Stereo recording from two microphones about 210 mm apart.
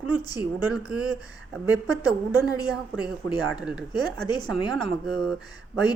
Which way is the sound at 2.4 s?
20° left (ahead or behind).